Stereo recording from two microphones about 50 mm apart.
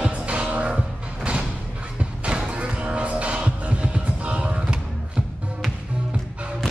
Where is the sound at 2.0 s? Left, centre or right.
Right.